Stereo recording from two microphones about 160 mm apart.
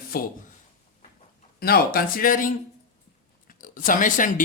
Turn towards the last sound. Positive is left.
turn(degrees=55)  # may be behind; listen again after turning